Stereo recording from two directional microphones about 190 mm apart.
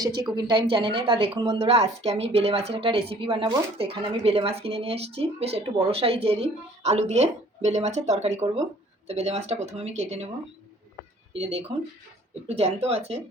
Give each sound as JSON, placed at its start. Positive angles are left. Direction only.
{"t": 0.3, "sound": "a woman's voice", "side_deg": -25}
{"t": 11.3, "sound": "a woman's voice", "side_deg": -30}